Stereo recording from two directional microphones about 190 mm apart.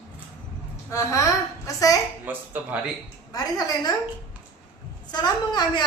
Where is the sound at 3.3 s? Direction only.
20° left (ahead or behind).